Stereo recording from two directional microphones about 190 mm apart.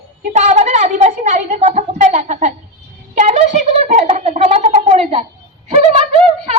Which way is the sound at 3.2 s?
35° right (ahead or behind).